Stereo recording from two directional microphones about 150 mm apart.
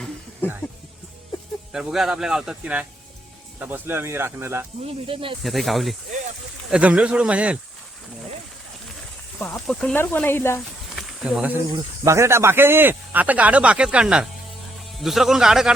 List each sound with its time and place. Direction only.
0.4 s speech: 10° left (ahead or behind)
1.7 s speech: 5° right (ahead or behind)
4.8 s speech: 40° right (ahead or behind)
5.4 s speech: centre (ahead or behind)
9.9 s speech: 10° left (ahead or behind)
10.9 s a sound: centre (ahead or behind)
12.0 s speech: 20° right (ahead or behind); by 15.7 s 5° right (ahead or behind)